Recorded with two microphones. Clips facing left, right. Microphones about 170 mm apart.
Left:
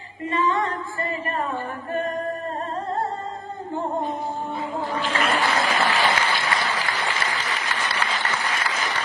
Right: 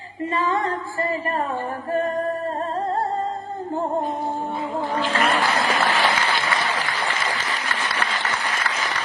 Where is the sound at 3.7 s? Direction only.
40° right (ahead or behind).